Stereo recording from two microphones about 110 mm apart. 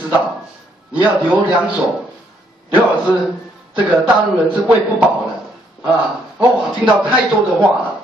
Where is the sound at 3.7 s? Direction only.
10° right (ahead or behind).